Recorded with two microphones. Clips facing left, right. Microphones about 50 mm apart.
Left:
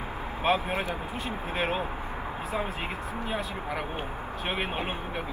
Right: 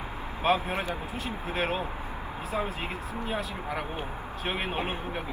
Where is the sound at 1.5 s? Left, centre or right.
Centre.